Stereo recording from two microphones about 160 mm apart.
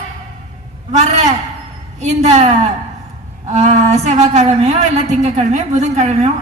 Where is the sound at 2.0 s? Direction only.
45° right (ahead or behind).